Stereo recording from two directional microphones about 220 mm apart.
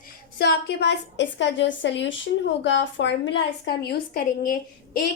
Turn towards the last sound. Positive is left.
turn(degrees=40)  # may be behind; listen again after turning